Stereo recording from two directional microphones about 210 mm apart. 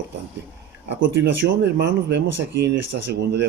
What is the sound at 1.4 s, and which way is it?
Speech, 60° right (ahead or behind).